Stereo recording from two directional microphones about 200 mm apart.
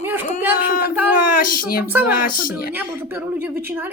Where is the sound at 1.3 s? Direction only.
45° left (ahead or behind).